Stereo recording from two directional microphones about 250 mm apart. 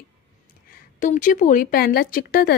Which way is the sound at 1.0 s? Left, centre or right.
Left.